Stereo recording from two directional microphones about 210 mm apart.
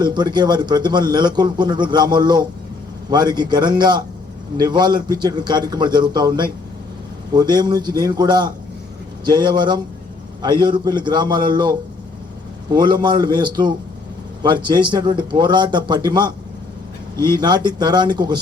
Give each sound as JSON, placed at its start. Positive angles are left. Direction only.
{"t": 0.0, "sound": "a man's voice", "side_deg": -20}